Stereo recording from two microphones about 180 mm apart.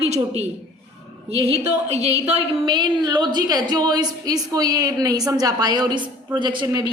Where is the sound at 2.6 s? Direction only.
25° right (ahead or behind).